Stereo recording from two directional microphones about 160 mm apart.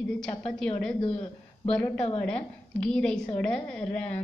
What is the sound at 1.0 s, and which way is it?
Speech, 35° left (ahead or behind).